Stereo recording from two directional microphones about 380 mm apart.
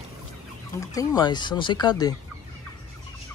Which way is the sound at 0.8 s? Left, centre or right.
Centre.